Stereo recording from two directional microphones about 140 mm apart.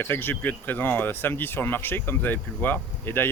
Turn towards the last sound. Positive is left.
turn(degrees=15)  # may be behind; listen again after turning